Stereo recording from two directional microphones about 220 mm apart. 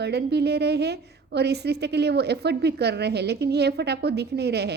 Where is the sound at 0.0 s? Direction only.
50° right (ahead or behind).